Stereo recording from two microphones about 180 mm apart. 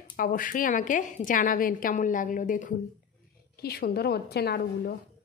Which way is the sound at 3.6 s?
60° left (ahead or behind).